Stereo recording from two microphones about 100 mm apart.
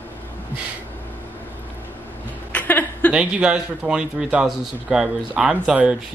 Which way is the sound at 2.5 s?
15° left (ahead or behind).